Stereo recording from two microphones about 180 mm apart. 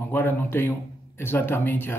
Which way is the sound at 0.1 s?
10° left (ahead or behind).